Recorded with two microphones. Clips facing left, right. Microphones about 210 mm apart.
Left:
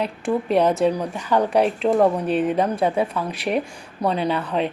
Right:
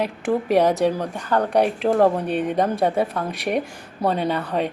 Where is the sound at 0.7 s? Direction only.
Centre (ahead or behind).